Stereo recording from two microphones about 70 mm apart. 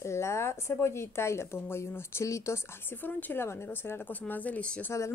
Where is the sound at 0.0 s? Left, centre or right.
Left.